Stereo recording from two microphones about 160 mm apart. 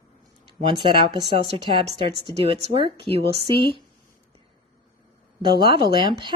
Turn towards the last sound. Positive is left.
turn(degrees=-30)  # may be behind; listen again after turning